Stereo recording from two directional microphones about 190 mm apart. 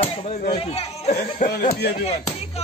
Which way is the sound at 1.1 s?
45° left (ahead or behind).